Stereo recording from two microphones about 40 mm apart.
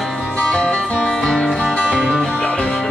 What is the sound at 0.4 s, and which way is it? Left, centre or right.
Music, left.